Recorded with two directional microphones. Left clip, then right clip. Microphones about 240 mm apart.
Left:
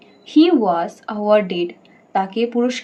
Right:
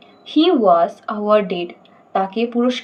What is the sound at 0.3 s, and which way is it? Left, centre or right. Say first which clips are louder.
A woman's voice: right 1 dB; centre.